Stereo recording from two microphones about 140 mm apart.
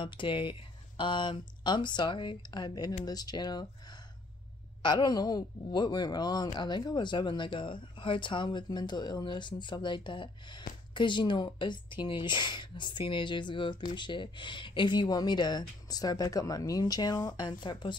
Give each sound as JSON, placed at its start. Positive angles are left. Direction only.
{"t": 0.0, "sound": "speech", "side_deg": 35}
{"t": 4.8, "sound": "speech", "side_deg": 30}